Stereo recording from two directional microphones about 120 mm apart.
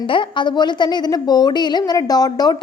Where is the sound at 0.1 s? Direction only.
45° left (ahead or behind).